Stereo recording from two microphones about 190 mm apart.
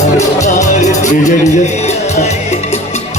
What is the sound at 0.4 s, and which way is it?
Music, 40° left (ahead or behind).